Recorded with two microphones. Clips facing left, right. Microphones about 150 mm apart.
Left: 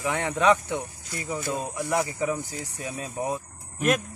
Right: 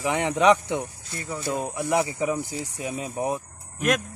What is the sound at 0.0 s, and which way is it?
Speech, 15° right (ahead or behind).